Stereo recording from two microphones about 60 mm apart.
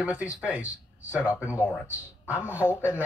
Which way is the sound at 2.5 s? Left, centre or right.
Right.